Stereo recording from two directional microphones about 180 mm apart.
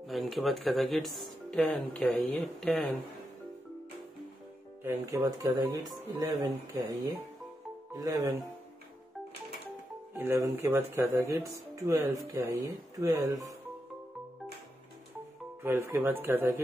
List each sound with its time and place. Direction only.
0.0 s speech: centre (ahead or behind)
5.0 s speech: 20° right (ahead or behind)
7.9 s speech: 20° right (ahead or behind)
10.1 s speech: 15° right (ahead or behind)
15.6 s speech: 15° right (ahead or behind)